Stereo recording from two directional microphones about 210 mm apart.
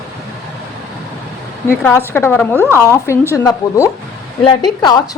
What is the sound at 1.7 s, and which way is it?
A woman's voice, 10° left (ahead or behind).